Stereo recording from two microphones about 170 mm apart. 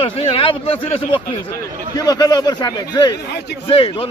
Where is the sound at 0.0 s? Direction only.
35° left (ahead or behind).